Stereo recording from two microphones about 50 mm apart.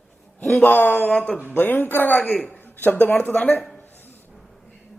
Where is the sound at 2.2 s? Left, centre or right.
Left.